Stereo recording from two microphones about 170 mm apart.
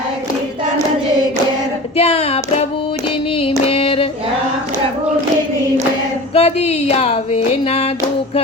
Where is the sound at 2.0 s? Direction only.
35° left (ahead or behind).